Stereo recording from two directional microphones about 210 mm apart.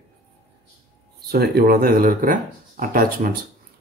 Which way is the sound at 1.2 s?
45° right (ahead or behind).